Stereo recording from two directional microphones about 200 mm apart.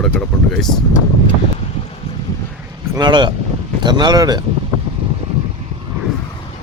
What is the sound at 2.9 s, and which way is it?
Speech, 20° right (ahead or behind).